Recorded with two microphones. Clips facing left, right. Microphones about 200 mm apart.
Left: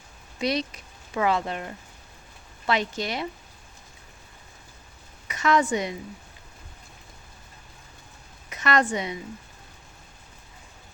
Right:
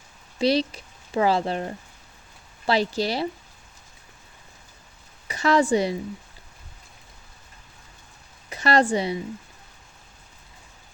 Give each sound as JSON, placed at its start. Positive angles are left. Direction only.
{"t": 0.3, "sound": "speech", "side_deg": -30}
{"t": 5.3, "sound": "speech", "side_deg": -30}
{"t": 8.4, "sound": "a woman's voice", "side_deg": -30}